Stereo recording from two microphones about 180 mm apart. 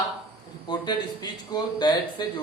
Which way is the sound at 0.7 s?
25° left (ahead or behind).